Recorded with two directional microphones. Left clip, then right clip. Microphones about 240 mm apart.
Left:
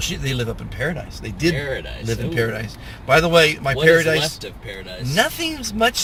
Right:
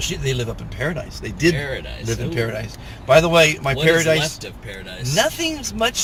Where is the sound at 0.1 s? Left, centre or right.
Centre.